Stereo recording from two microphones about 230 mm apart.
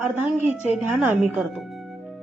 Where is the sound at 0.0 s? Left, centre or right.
Centre.